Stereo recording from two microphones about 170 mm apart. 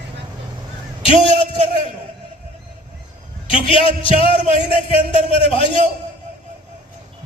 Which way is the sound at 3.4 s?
30° left (ahead or behind).